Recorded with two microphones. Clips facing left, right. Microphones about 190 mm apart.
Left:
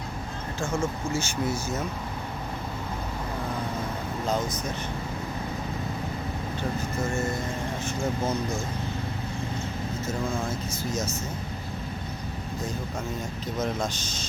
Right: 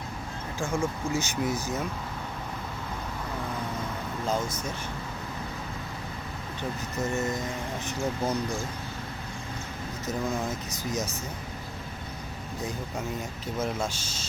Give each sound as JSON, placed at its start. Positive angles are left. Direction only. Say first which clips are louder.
{"t": 0.6, "sound": "speech", "louder": "even", "side_deg": -15}
{"t": 7.0, "sound": "music", "louder": "right 1 dB", "side_deg": -20}
{"t": 7.9, "sound": "speech", "louder": "left 1 dB", "side_deg": -15}
{"t": 10.1, "sound": "speech", "louder": "right 1 dB", "side_deg": -15}
{"t": 13.6, "sound": "speech", "louder": "left 1 dB", "side_deg": -10}